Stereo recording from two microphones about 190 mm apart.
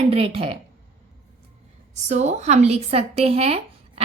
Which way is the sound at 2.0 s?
40° right (ahead or behind).